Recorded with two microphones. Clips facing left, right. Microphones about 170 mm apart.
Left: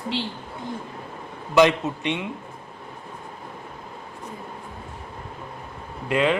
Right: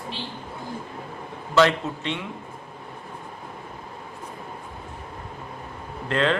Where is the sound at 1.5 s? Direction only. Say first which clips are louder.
Left 2 dB; 15° left (ahead or behind).